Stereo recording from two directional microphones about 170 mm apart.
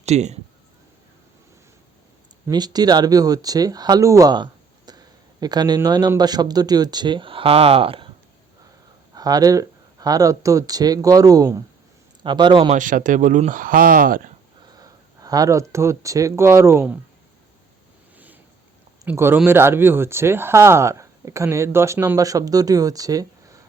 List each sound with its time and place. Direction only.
0.0 s speech: 40° right (ahead or behind)
2.5 s a man's voice: 25° right (ahead or behind)
9.1 s a man's voice: 20° right (ahead or behind)
12.7 s speech: 50° right (ahead or behind)
14.8 s speech: 20° right (ahead or behind)
19.0 s speech: 15° right (ahead or behind)